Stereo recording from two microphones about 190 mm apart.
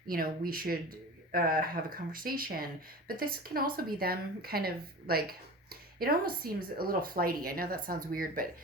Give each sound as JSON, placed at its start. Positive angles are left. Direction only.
{"t": 0.1, "sound": "speech", "side_deg": -50}